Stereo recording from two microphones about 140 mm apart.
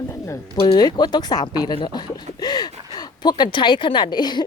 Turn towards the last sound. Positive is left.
turn(degrees=30)  # may be behind; listen again after turning